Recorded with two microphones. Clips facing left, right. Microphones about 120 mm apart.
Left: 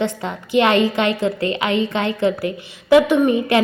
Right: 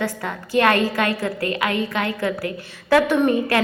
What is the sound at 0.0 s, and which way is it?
A woman's voice, 20° left (ahead or behind).